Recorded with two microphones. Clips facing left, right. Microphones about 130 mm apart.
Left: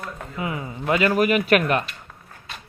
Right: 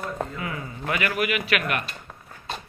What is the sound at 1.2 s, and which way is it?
Speech, 40° left (ahead or behind).